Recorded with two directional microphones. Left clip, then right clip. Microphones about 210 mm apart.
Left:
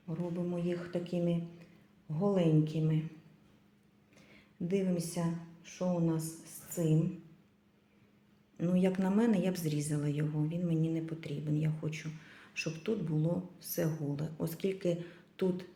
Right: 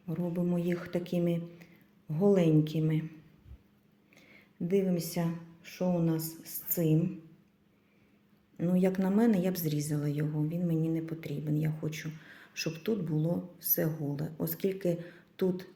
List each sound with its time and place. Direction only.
0.1 s a woman's voice: 35° right (ahead or behind)
4.1 s a woman's voice: 20° right (ahead or behind)
8.5 s a woman's voice: 20° right (ahead or behind)